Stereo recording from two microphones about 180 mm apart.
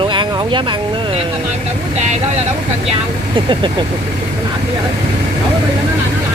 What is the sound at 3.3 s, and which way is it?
Speech, 25° right (ahead or behind).